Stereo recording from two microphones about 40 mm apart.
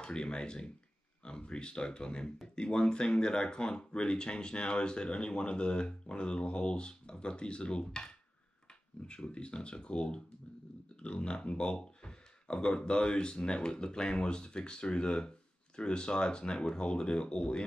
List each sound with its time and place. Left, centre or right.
0.0 s speech: left